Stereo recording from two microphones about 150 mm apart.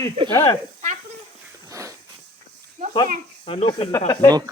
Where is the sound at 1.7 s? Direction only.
20° right (ahead or behind).